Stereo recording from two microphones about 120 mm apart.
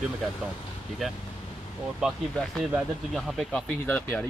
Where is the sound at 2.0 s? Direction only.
5° right (ahead or behind).